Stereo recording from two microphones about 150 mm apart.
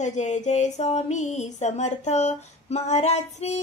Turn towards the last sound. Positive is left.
turn(degrees=45)  # may be behind; listen again after turning